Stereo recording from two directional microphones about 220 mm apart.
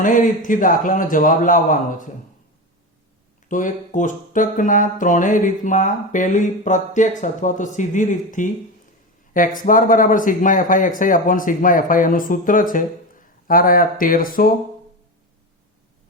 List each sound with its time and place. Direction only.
0.0 s speech: 35° left (ahead or behind)
3.5 s speech: 35° left (ahead or behind)